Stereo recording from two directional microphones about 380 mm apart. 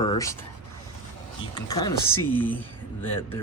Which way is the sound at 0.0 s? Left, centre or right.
Centre.